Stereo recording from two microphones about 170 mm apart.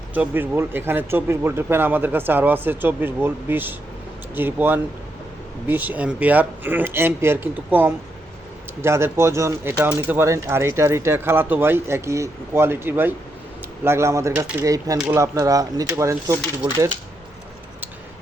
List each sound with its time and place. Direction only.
0.1 s speech: 10° right (ahead or behind)